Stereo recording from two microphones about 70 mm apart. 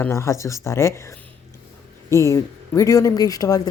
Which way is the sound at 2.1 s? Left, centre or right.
Left.